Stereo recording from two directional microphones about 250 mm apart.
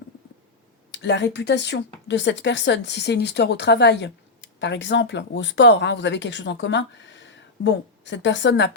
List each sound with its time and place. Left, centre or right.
0.9 s speech: left